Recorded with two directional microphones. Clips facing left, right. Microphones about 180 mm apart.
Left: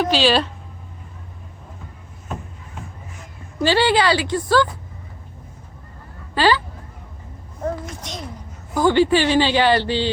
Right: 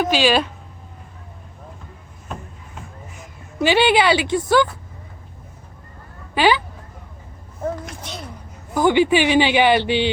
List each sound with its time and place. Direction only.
0.0 s speech: 10° right (ahead or behind)
3.6 s speech: 20° right (ahead or behind)
7.6 s a child's voice: 5° right (ahead or behind)
8.7 s speech: 15° right (ahead or behind)